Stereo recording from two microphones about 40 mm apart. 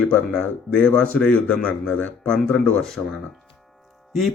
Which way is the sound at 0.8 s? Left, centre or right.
Left.